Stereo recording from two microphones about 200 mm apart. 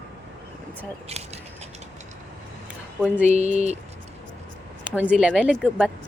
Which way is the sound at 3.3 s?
35° right (ahead or behind).